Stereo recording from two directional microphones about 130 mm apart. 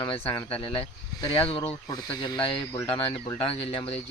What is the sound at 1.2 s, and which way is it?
Speech, 30° left (ahead or behind).